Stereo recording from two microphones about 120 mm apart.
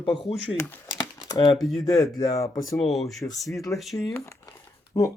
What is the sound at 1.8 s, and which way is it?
Speech, 25° left (ahead or behind).